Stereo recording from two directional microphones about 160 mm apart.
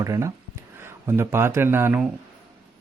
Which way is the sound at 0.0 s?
20° right (ahead or behind).